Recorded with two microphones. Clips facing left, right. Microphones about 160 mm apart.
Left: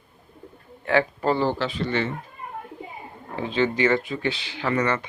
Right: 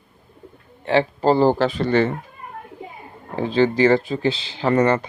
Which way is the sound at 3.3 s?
35° right (ahead or behind).